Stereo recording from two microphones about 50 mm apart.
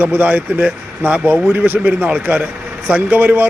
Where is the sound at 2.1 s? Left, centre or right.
Right.